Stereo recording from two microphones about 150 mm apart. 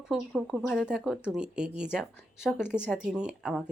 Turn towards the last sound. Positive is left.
turn(degrees=-5)  # may be behind; listen again after turning